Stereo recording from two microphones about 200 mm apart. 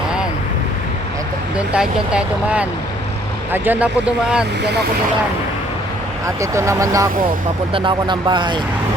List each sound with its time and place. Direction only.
1.5 s speech: 5° right (ahead or behind)
6.2 s speech: 15° right (ahead or behind)